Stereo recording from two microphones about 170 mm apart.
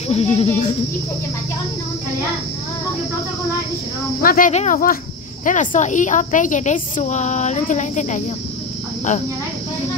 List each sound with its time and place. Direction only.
0.1 s cricket: 35° left (ahead or behind)
4.2 s speech: 60° left (ahead or behind)
4.5 s a woman's voice: 45° left (ahead or behind)